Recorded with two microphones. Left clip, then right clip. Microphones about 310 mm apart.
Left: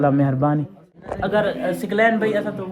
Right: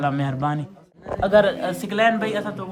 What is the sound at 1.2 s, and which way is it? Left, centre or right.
Speech, right.